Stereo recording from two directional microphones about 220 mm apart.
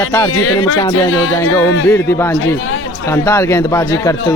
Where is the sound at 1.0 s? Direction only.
75° left (ahead or behind).